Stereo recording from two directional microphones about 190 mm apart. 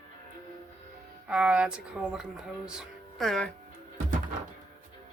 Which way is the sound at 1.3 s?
5° right (ahead or behind).